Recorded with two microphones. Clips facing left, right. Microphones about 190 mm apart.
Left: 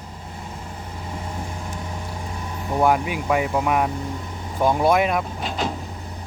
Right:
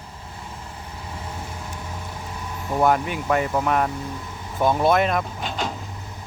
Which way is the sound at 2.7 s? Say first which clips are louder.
Left 1 dB; 5° left (ahead or behind).